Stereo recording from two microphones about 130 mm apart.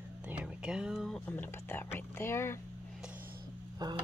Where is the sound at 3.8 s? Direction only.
30° right (ahead or behind).